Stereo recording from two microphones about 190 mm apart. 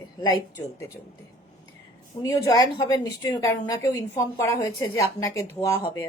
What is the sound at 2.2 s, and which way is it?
A woman's voice, 20° left (ahead or behind).